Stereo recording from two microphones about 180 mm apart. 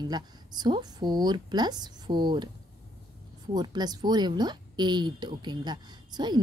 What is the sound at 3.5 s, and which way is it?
A woman's voice, 25° right (ahead or behind).